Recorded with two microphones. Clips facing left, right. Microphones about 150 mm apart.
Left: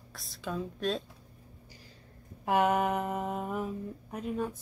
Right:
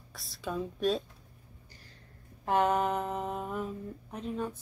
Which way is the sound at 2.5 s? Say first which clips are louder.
Left 1 dB; 10° left (ahead or behind).